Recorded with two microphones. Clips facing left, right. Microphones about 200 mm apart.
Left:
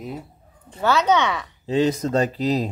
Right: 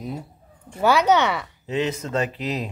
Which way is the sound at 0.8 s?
10° right (ahead or behind).